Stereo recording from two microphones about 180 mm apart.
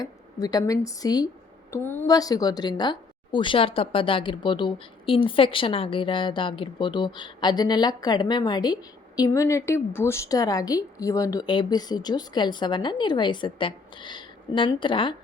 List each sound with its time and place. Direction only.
0.0 s a woman's voice: 20° left (ahead or behind)